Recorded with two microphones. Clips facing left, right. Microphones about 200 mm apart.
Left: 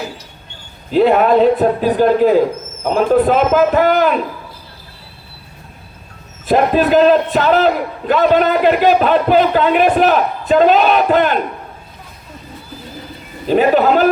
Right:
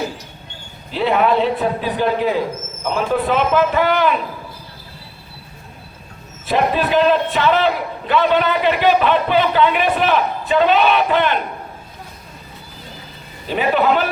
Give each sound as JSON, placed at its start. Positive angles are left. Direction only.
{"t": 0.9, "sound": "a man's voice", "side_deg": 45}
{"t": 6.5, "sound": "a man's voice", "side_deg": 40}
{"t": 13.5, "sound": "a man's voice", "side_deg": 40}